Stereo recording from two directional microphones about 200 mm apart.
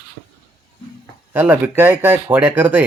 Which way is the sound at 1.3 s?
10° right (ahead or behind).